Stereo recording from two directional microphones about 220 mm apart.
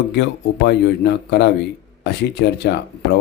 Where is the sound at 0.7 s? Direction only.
50° left (ahead or behind).